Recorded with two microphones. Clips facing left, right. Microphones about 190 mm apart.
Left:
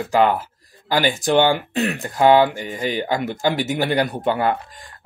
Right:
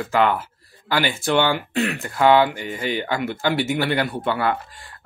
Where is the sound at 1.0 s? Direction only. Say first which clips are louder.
Left 4 dB; 40° left (ahead or behind).